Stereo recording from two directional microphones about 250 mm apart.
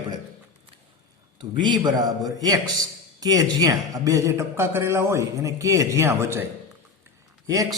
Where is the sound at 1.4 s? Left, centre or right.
Centre.